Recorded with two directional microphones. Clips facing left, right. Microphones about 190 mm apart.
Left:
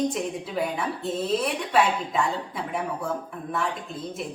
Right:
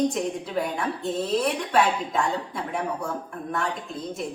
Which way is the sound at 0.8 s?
Centre (ahead or behind).